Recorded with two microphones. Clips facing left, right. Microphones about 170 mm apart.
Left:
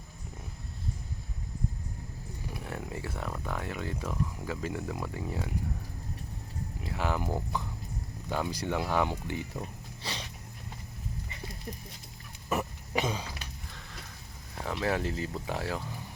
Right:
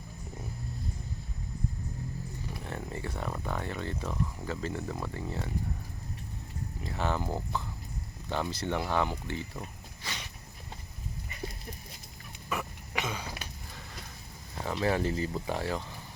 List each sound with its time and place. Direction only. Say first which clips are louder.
2.5 s speech: left 2 dB; 5° left (ahead or behind)
6.8 s speech: even; 5° left (ahead or behind)
10.0 s dog: left 3 dB; 30° left (ahead or behind)
12.5 s throat clearing: left 4 dB; 40° left (ahead or behind)
14.7 s speech: right 2 dB; centre (ahead or behind)